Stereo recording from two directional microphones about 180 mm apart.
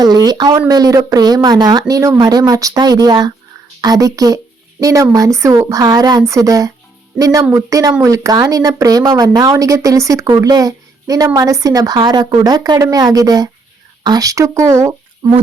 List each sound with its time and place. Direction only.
0.3 s speech: 20° right (ahead or behind)